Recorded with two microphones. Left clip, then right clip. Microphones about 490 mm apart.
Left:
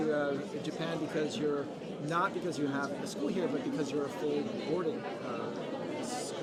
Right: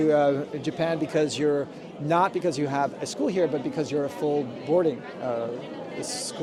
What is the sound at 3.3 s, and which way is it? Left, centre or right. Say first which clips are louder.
Speech: right 9 dB; right.